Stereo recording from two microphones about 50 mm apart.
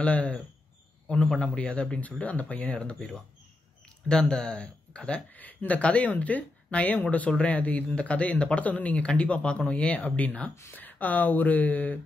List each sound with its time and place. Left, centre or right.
0.0 s a man's voice: left
4.1 s speech: centre
5.3 s speech: left